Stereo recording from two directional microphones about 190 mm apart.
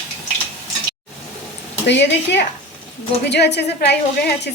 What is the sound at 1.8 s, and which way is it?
A woman's voice, 65° left (ahead or behind).